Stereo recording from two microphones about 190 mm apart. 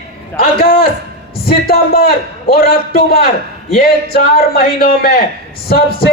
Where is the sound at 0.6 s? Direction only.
50° left (ahead or behind).